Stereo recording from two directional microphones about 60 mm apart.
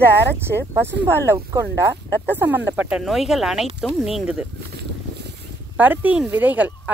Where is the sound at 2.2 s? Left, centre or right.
Right.